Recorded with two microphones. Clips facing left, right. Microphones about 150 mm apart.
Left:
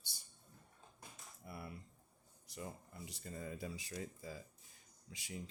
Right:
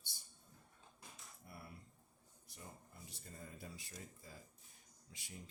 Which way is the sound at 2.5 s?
90° left.